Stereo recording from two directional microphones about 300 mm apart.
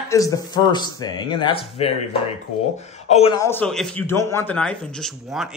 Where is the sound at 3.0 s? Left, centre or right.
Centre.